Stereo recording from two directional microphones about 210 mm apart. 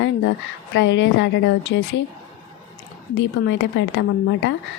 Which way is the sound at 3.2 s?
60° left (ahead or behind).